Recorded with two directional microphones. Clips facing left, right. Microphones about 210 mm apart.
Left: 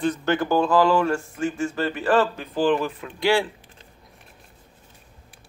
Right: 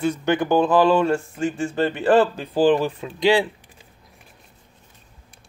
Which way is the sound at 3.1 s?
20° right (ahead or behind).